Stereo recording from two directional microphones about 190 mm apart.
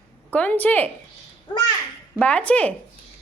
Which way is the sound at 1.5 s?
25° left (ahead or behind).